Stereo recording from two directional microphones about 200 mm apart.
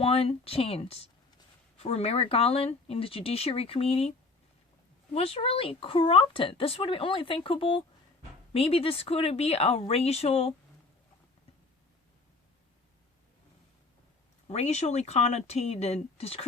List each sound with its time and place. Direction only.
0.0 s speech: 30° left (ahead or behind)
5.1 s speech: 30° left (ahead or behind)
14.4 s speech: 30° left (ahead or behind)